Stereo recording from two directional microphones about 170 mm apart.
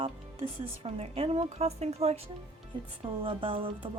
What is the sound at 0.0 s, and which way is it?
Speech, 35° right (ahead or behind).